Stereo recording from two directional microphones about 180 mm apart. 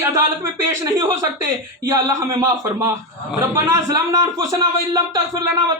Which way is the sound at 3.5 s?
20° right (ahead or behind).